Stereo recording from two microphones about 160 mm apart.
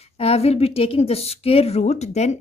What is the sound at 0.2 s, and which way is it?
A woman's voice, 40° left (ahead or behind).